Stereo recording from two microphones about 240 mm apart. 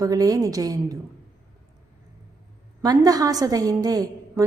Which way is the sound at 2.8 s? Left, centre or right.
Centre.